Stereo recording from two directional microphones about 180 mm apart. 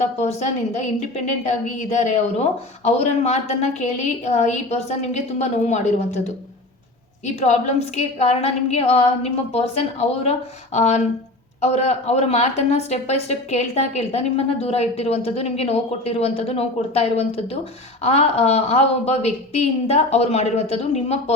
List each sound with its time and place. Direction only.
0.2 s speech: 40° left (ahead or behind)
7.3 s speech: 40° left (ahead or behind)